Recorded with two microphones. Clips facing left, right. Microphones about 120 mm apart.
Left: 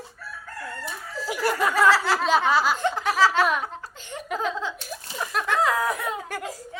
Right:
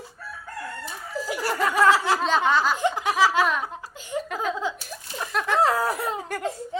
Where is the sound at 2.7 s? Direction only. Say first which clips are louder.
Right 1 dB; 15° right (ahead or behind).